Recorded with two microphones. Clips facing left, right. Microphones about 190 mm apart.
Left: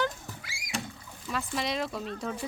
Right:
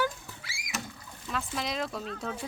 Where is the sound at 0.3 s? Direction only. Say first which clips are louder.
Left 3 dB; 40° left (ahead or behind).